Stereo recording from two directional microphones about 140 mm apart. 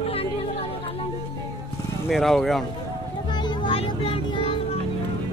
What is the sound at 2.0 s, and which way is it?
Speech, centre (ahead or behind).